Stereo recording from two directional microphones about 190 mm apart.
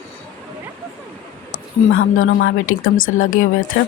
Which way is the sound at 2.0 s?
90° left.